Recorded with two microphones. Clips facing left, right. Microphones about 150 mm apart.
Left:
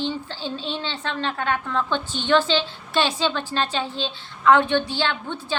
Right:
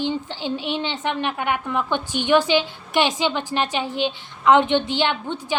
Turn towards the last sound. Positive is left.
turn(degrees=-15)  # may be behind; listen again after turning